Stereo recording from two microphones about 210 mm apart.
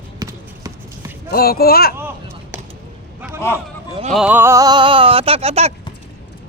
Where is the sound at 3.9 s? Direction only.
30° right (ahead or behind).